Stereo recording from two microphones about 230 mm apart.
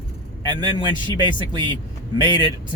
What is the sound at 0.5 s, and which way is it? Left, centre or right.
Speech, centre.